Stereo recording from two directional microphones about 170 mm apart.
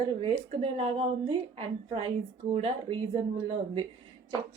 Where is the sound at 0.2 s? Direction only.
35° right (ahead or behind).